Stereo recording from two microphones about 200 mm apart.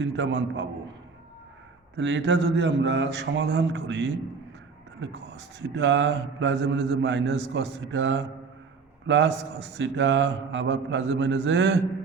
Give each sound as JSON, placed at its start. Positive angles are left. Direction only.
{"t": 0.0, "sound": "speech", "side_deg": -60}
{"t": 2.0, "sound": "speech", "side_deg": -65}
{"t": 5.5, "sound": "speech", "side_deg": -60}